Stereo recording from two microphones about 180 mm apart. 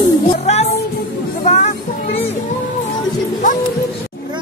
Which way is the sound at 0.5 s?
35° left (ahead or behind).